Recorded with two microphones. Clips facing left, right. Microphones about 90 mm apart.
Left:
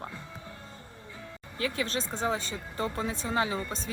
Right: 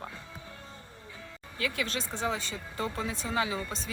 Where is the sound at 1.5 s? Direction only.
35° left (ahead or behind).